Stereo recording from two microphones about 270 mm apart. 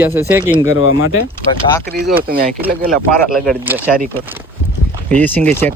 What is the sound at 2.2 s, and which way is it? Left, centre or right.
Speech, right.